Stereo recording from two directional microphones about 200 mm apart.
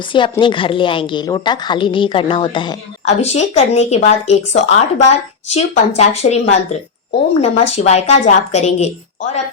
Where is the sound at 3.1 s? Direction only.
35° left (ahead or behind).